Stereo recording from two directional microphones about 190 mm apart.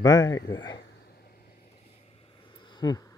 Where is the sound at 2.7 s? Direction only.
20° left (ahead or behind).